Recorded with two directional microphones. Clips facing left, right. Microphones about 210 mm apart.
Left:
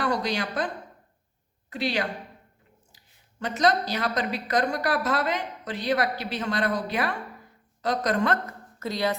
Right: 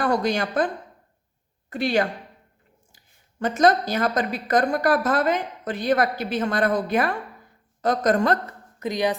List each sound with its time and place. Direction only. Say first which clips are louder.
0.0 s a woman's voice: right 4 dB; 50° right (ahead or behind)
1.7 s a woman's voice: right 6 dB; 50° right (ahead or behind)
3.4 s a woman's voice: right 5 dB; 50° right (ahead or behind)
8.8 s a woman's voice: right 3 dB; 15° right (ahead or behind)